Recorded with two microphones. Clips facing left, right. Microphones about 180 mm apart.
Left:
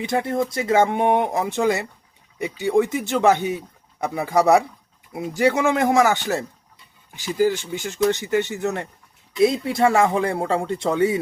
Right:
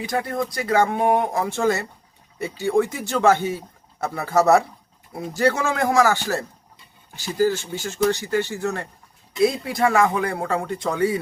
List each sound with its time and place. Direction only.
0.0 s speech: 25° left (ahead or behind)